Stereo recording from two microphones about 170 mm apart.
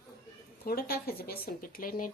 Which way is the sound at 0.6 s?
60° left (ahead or behind).